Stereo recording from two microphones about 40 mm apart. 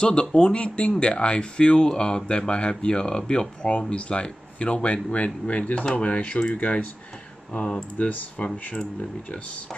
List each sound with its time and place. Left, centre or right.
0.0 s speech: left